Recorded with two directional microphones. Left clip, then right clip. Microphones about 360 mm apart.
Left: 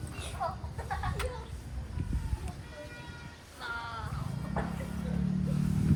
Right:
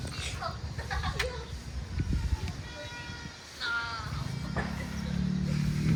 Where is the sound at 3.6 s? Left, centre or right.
Centre.